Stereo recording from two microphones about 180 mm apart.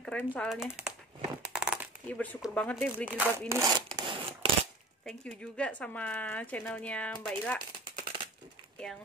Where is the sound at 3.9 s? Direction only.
30° right (ahead or behind).